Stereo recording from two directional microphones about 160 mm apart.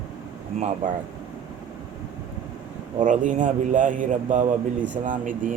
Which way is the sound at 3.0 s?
55° right (ahead or behind).